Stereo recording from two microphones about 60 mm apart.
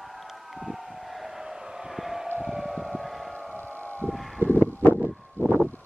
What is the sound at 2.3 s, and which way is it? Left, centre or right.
Civil defense siren, centre.